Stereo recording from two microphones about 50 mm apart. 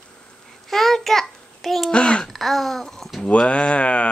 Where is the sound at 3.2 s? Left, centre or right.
Left.